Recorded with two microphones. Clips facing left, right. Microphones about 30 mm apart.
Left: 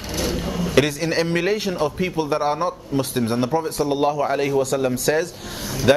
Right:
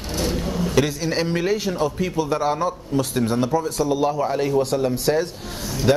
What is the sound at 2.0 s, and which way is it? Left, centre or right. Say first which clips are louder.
Speech: left 1 dB; left.